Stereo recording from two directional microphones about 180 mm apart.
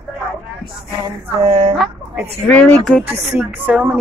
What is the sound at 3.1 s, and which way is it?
Speech, 10° right (ahead or behind).